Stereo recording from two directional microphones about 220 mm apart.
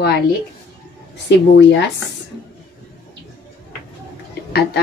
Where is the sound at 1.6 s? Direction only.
55° left (ahead or behind).